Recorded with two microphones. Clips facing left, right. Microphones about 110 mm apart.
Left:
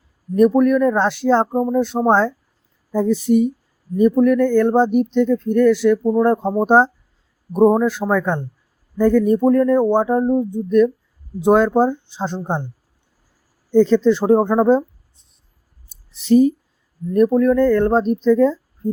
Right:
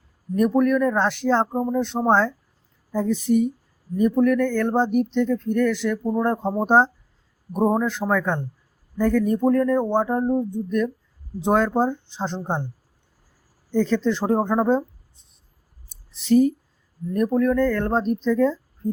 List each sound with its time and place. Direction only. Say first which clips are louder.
0.3 s speech: left 5 dB; 15° left (ahead or behind)
13.7 s speech: left 8 dB; 20° left (ahead or behind)
15.9 s a sound: left 4 dB; 15° left (ahead or behind)
17.2 s speech: left 6 dB; 15° left (ahead or behind)